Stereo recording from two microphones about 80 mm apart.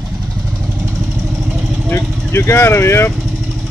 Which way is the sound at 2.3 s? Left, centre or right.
Left.